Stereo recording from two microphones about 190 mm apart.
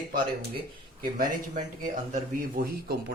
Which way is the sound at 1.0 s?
50° right (ahead or behind).